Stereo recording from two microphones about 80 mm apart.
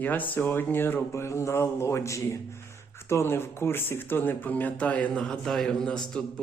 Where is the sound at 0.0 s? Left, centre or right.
Left.